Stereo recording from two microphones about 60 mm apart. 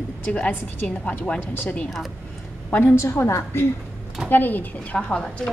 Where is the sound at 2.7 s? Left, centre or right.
Left.